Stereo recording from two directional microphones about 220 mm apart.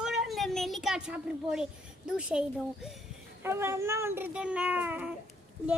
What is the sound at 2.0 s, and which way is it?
A child's voice, 5° right (ahead or behind).